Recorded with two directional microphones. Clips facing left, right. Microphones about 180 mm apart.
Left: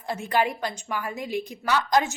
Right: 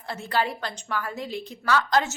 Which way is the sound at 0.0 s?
15° left (ahead or behind).